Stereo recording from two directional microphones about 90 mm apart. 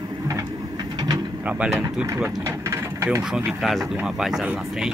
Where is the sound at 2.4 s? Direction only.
30° right (ahead or behind).